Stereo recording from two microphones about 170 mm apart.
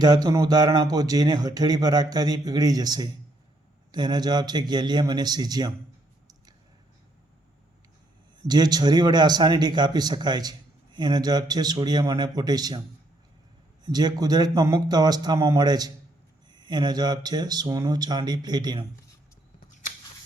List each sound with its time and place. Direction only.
0.0 s speech: 20° right (ahead or behind)
8.4 s speech: 25° right (ahead or behind)
13.8 s speech: 25° right (ahead or behind)